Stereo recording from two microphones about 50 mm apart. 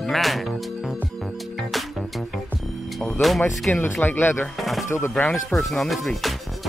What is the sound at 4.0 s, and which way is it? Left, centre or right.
Speech, left.